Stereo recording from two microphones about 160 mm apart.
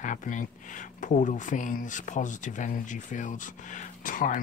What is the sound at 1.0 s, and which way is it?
Speech, 50° left (ahead or behind).